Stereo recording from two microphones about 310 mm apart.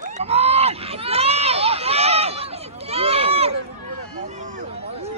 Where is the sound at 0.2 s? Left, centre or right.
Centre.